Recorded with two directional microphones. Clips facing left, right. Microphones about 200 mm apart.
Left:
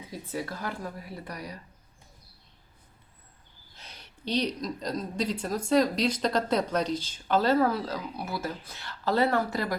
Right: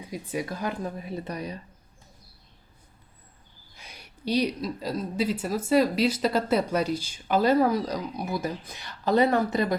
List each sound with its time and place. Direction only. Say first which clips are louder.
0.1 s speech: right 3 dB; 15° right (ahead or behind)
3.8 s speech: right 2 dB; 10° right (ahead or behind)